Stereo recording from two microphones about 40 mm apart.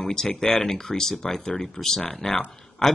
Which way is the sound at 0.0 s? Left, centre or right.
Centre.